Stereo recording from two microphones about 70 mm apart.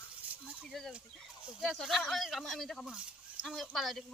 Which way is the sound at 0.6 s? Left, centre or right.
Centre.